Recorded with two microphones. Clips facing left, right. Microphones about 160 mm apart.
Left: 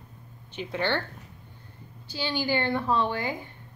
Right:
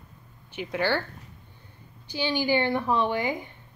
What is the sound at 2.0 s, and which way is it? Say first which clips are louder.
A woman's voice: right 3 dB; 15° right (ahead or behind).